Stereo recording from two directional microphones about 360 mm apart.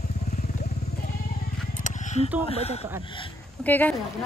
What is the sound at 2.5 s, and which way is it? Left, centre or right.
Speech, centre.